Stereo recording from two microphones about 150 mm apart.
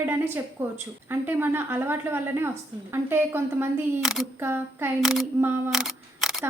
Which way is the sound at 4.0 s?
Centre (ahead or behind).